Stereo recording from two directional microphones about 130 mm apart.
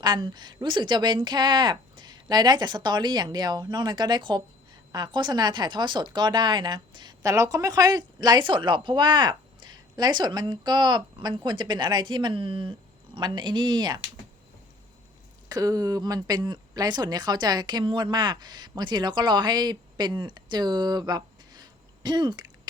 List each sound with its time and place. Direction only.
0.0 s speech: 35° right (ahead or behind)
15.4 s speech: 30° right (ahead or behind)